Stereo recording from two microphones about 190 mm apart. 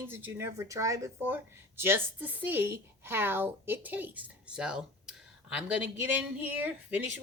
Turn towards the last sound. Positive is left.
turn(degrees=-10)  # may be behind; listen again after turning